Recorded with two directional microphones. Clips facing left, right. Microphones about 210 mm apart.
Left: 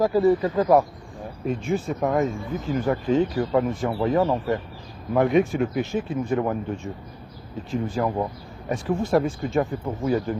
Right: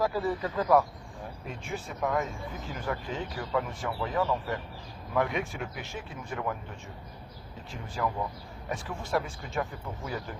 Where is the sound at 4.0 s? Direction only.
35° left (ahead or behind).